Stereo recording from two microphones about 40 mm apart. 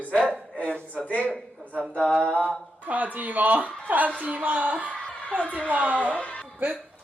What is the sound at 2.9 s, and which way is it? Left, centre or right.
A woman's voice, right.